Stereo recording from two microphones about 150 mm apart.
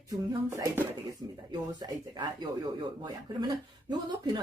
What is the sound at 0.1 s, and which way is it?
A woman's voice, 25° right (ahead or behind).